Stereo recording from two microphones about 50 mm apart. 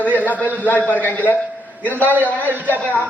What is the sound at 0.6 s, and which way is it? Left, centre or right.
Speech, left.